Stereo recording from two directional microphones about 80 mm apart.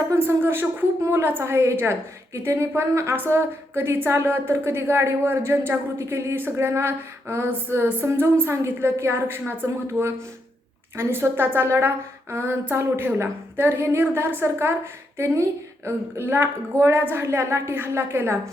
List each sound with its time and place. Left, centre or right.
0.2 s a woman's voice: right